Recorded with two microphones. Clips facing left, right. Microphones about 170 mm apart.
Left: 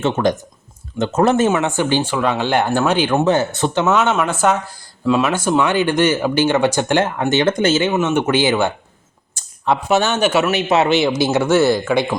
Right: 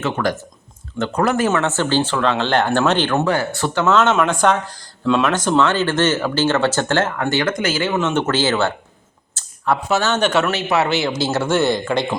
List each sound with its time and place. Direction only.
0.0 s speech: 20° left (ahead or behind)
1.5 s speech: 15° left (ahead or behind)
3.2 s speech: 20° left (ahead or behind)
7.9 s speech: 10° left (ahead or behind)
10.6 s speech: 20° left (ahead or behind)